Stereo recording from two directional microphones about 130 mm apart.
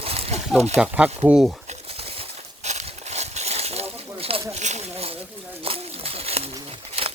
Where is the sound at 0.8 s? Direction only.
10° right (ahead or behind).